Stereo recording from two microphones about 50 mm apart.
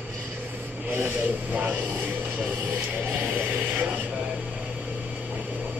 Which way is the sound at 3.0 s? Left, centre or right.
Right.